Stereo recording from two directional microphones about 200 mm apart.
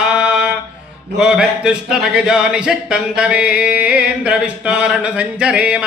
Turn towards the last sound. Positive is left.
turn(degrees=-5)  # may be behind; listen again after turning